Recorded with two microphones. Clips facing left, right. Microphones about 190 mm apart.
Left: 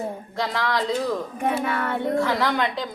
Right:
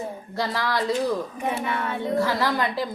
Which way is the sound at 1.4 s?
55° left (ahead or behind).